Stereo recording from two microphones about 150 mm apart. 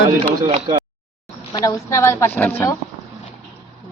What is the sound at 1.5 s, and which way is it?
A woman's voice, 25° left (ahead or behind).